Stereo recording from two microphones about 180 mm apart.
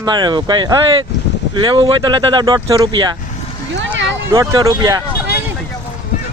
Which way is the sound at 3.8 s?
90° right.